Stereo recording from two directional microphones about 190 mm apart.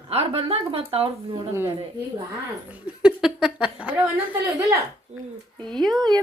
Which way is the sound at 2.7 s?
5° right (ahead or behind).